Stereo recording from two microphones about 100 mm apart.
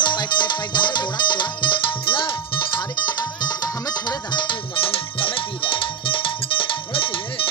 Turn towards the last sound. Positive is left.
turn(degrees=60)  # may be behind; listen again after turning